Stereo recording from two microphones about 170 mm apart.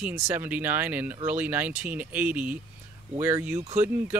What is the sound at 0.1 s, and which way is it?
Speech, 15° right (ahead or behind).